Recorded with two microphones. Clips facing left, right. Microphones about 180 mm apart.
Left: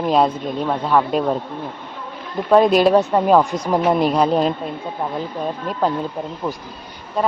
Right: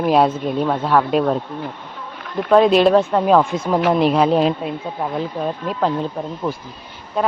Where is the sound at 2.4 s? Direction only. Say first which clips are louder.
Right 1 dB; 5° left (ahead or behind).